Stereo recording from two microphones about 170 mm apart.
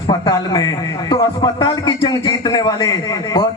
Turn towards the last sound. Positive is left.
turn(degrees=20)  # may be behind; listen again after turning